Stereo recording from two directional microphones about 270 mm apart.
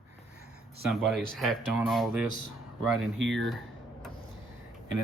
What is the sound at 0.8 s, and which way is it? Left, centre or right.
Speech, centre.